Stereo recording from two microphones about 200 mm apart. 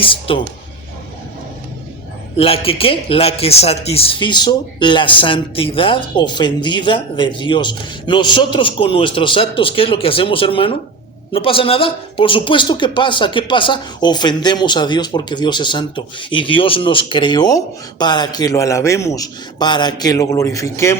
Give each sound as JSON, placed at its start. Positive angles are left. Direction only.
{"t": 0.0, "sound": "a man's voice", "side_deg": 25}
{"t": 2.4, "sound": "a man's voice", "side_deg": 30}